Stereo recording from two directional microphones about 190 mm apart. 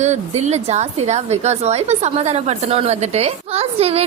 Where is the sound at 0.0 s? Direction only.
35° right (ahead or behind).